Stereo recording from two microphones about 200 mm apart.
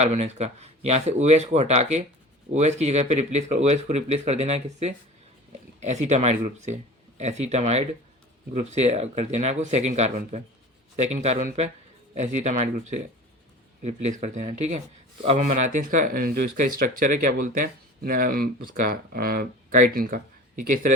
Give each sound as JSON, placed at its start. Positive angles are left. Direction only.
{"t": 0.0, "sound": "speech", "side_deg": -35}